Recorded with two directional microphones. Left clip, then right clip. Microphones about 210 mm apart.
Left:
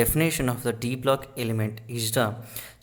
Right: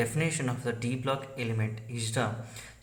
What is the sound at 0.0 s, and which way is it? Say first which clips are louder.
Speech: left 7 dB; 45° left (ahead or behind).